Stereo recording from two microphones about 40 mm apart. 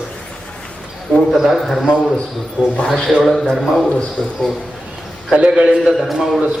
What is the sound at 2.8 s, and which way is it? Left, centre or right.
Speech, centre.